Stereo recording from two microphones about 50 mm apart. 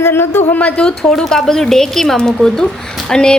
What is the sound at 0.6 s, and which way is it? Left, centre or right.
Speech, left.